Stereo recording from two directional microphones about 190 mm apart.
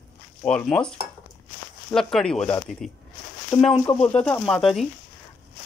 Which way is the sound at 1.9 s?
5° left (ahead or behind).